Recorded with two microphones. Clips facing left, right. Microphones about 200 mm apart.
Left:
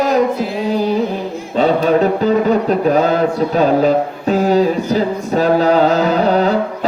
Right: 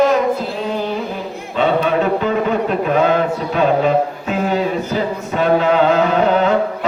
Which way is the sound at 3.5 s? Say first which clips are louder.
Left 1 dB; 35° left (ahead or behind).